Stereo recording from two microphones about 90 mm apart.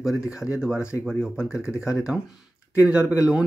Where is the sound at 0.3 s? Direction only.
10° right (ahead or behind).